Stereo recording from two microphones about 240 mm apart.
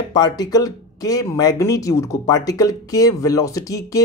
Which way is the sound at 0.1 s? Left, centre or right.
Centre.